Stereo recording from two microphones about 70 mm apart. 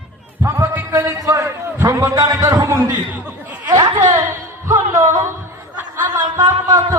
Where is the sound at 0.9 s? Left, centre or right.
Right.